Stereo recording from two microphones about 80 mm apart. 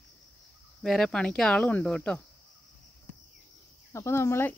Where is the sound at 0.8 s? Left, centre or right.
Centre.